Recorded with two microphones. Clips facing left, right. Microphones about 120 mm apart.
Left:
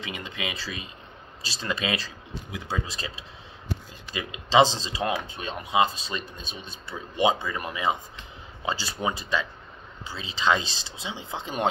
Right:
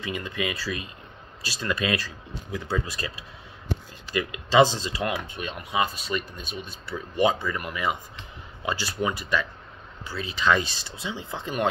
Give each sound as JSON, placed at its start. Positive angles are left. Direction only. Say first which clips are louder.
{"t": 0.0, "sound": "speech", "louder": "right 4 dB", "side_deg": 20}